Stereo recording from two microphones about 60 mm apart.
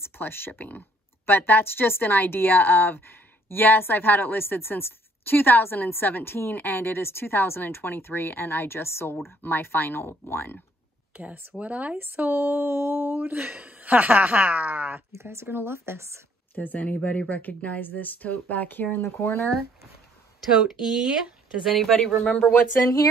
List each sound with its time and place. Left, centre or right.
0.0 s a woman's voice: left
11.1 s speech: right
12.0 s speech: right
15.1 s speech: right
16.5 s speech: left
20.8 s speech: centre
22.2 s speech: left